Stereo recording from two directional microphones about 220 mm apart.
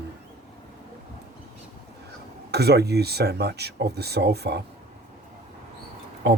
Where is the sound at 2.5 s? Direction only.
50° right (ahead or behind).